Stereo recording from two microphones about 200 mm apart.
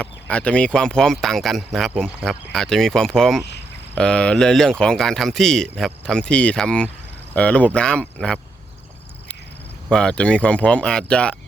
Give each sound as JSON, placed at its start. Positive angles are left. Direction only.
{"t": 0.0, "sound": "speech", "side_deg": 5}
{"t": 9.9, "sound": "speech", "side_deg": 5}